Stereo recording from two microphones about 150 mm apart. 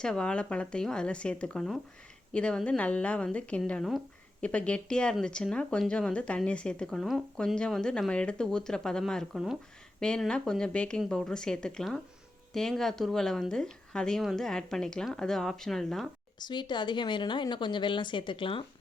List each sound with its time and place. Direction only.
0.0 s speech: 5° left (ahead or behind)
16.4 s speech: 30° left (ahead or behind)